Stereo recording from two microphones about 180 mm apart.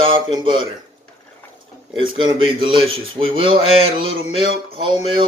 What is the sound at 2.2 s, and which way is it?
Speech, 25° right (ahead or behind).